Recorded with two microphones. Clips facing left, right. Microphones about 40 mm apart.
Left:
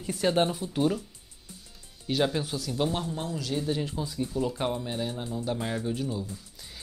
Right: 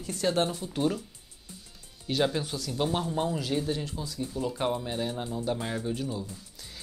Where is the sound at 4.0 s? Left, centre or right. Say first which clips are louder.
Left 3 dB; left.